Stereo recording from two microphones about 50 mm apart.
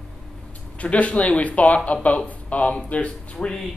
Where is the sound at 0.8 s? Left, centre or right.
Left.